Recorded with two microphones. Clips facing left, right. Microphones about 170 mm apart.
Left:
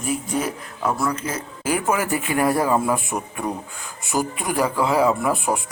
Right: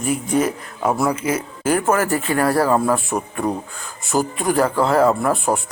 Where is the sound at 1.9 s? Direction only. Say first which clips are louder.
Right 3 dB; 10° left (ahead or behind).